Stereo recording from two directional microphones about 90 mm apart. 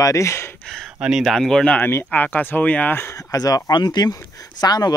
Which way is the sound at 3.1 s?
45° left (ahead or behind).